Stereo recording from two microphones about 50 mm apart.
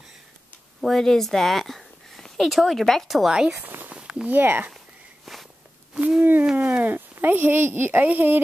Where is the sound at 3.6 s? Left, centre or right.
Right.